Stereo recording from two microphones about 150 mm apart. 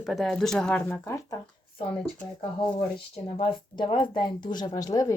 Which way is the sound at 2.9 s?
35° left (ahead or behind).